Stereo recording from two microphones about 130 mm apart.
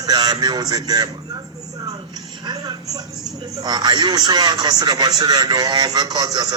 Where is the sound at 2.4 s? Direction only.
35° right (ahead or behind).